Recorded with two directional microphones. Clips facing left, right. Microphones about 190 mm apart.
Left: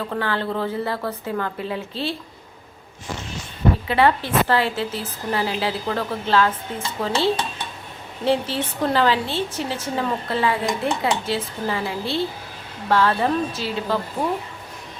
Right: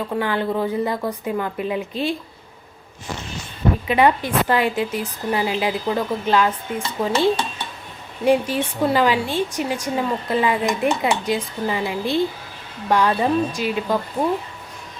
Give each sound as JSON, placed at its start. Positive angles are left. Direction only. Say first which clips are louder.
{"t": 0.1, "sound": "a woman's voice", "louder": "right 4 dB", "side_deg": -15}
{"t": 3.8, "sound": "a woman's voice", "louder": "right 3 dB", "side_deg": -15}